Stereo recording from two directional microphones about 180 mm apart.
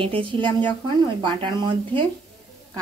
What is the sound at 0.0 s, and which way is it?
A woman's voice, 30° right (ahead or behind).